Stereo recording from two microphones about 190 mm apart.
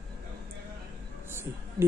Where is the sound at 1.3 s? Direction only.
15° right (ahead or behind).